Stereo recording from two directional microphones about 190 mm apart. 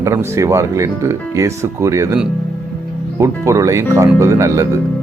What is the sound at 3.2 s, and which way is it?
Speech, 15° right (ahead or behind).